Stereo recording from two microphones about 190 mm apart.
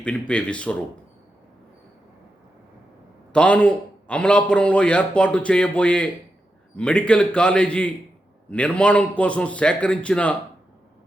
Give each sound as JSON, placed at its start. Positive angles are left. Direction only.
{"t": 0.0, "sound": "a man's voice", "side_deg": 5}
{"t": 3.3, "sound": "a man's voice", "side_deg": 5}